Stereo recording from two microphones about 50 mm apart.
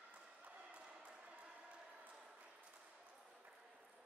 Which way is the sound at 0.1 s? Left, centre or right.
Right.